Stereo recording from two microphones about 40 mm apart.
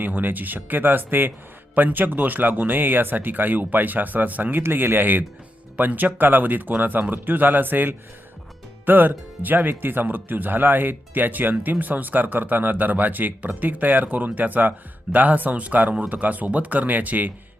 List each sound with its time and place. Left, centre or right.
0.0 s speech: right
4.6 s speech: right